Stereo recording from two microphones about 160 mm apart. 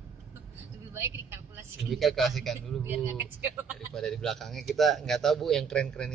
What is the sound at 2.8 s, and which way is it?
Speech, 10° right (ahead or behind).